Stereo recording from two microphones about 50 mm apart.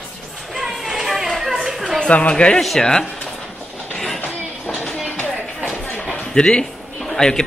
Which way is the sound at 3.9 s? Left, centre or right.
Centre.